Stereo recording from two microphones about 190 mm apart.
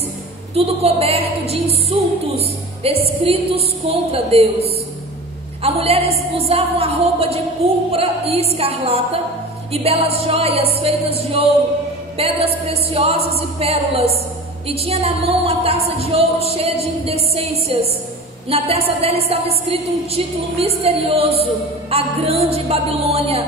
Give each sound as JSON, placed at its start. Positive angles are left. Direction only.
{"t": 0.6, "sound": "speech", "side_deg": -30}